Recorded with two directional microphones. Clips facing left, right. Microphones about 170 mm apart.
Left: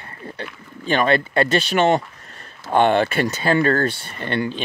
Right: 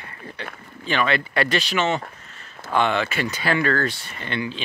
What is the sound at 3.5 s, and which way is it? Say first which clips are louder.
Speech: left 4 dB; 40° left (ahead or behind).